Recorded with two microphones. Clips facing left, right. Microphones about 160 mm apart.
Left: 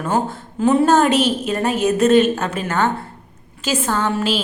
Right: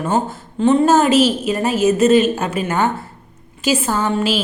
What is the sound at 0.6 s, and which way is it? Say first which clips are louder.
Speech: right 2 dB; 5° left (ahead or behind).